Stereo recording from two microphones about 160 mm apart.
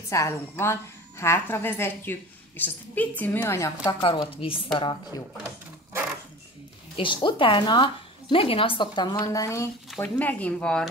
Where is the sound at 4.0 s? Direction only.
30° left (ahead or behind).